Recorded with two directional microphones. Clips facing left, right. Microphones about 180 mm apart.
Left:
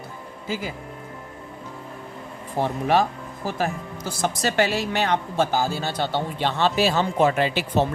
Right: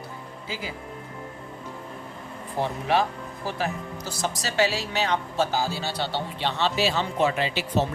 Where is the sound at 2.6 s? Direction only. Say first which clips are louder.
Left 3 dB; 45° left (ahead or behind).